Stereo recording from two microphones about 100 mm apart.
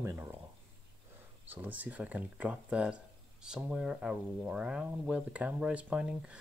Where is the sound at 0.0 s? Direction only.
30° right (ahead or behind).